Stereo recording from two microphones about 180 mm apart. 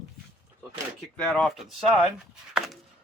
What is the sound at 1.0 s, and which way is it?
Speech, 5° left (ahead or behind).